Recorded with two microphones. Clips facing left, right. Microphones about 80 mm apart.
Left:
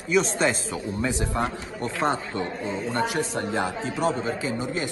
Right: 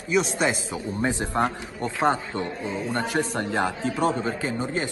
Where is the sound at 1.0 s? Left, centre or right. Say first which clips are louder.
Right 3 dB; right.